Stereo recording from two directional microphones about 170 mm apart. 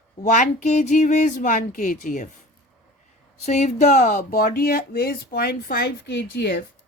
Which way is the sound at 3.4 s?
45° left (ahead or behind).